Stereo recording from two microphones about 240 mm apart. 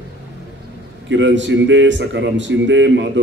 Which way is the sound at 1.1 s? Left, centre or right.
Right.